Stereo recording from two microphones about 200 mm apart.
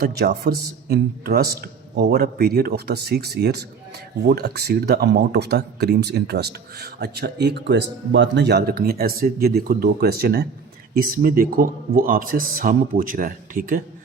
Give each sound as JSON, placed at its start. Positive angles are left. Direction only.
{"t": 0.0, "sound": "speech", "side_deg": -50}